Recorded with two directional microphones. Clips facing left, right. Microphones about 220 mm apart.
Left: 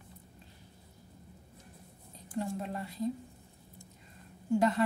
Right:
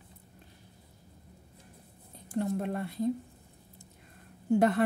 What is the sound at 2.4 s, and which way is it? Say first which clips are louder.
Speech: right 5 dB; 60° right (ahead or behind).